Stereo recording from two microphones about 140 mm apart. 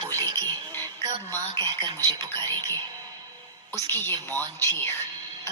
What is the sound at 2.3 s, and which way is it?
Speech, 15° left (ahead or behind).